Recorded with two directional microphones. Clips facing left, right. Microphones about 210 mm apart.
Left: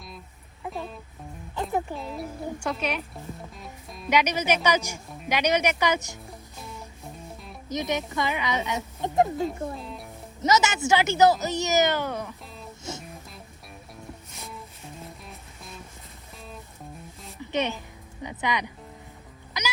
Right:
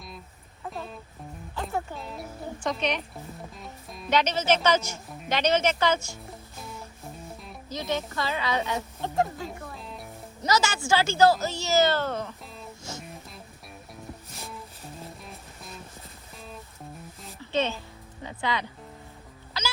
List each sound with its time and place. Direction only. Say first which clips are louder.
0.7 s music: left 2 dB; centre (ahead or behind)
2.0 s speech: left 4 dB; centre (ahead or behind)
4.1 s speech: even; 10° left (ahead or behind)
6.1 s music: even; centre (ahead or behind)
7.7 s speech: left 2 dB; 20° left (ahead or behind)
9.7 s music: left 3 dB; centre (ahead or behind)
10.4 s a woman's voice: left 3 dB; 20° left (ahead or behind)
14.3 s a sound: even; centre (ahead or behind)
17.4 s a sound: even; 15° left (ahead or behind)
18.2 s speech: left 1 dB; 15° left (ahead or behind)
19.6 s music: left 1 dB; 15° left (ahead or behind)